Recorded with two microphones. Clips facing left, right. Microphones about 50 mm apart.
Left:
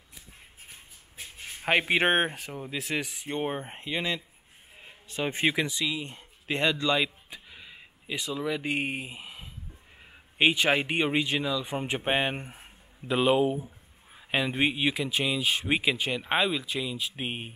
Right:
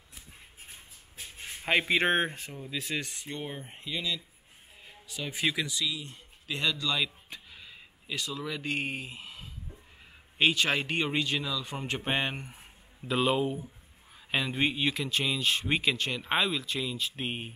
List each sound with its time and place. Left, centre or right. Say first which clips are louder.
1.6 s speech: left 2 dB; centre
3.3 s speech: left 7 dB; left
7.2 s a sound: left 1 dB; centre
10.3 s speech: left 3 dB; centre
13.0 s speech: left 4 dB; centre